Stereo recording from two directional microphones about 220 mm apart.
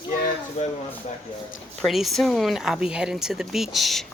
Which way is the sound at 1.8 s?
Centre (ahead or behind).